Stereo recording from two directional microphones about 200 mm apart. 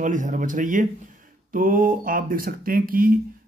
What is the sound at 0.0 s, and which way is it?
Speech, 40° right (ahead or behind).